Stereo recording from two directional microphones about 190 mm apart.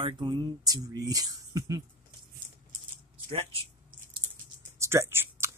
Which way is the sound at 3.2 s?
30° right (ahead or behind).